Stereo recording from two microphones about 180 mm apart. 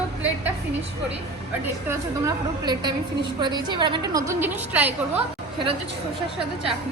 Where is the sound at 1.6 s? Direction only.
15° right (ahead or behind).